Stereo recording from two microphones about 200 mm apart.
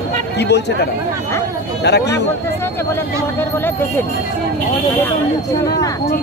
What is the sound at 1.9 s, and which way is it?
Speech, 55° left (ahead or behind).